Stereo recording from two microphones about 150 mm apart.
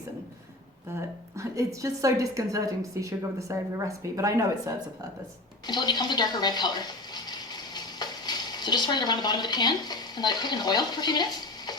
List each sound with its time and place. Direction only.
0.9 s a woman's voice: 20° right (ahead or behind)
5.6 s speech: 30° left (ahead or behind)